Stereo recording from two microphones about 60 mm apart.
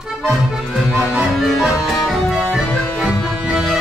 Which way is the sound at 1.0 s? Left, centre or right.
Centre.